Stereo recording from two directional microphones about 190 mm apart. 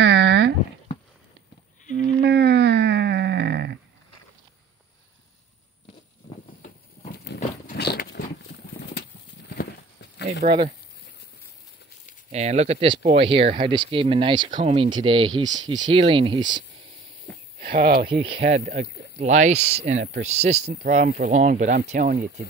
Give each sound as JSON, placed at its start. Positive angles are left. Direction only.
{"t": 0.0, "sound": "a sound", "side_deg": -65}
{"t": 2.2, "sound": "a sound", "side_deg": -60}
{"t": 7.7, "sound": "a sound", "side_deg": 60}
{"t": 9.6, "sound": "horse", "side_deg": 65}
{"t": 10.4, "sound": "speech", "side_deg": -40}
{"t": 12.3, "sound": "speech", "side_deg": -35}
{"t": 17.6, "sound": "speech", "side_deg": -50}
{"t": 18.0, "sound": "speech", "side_deg": -30}
{"t": 18.5, "sound": "speech", "side_deg": -40}